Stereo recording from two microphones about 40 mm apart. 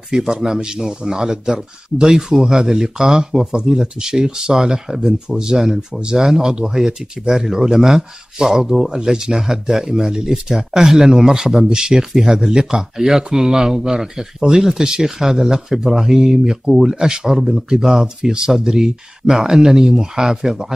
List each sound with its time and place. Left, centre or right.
0.1 s speech: centre